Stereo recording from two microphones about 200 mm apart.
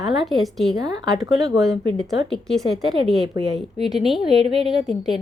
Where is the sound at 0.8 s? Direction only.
20° right (ahead or behind).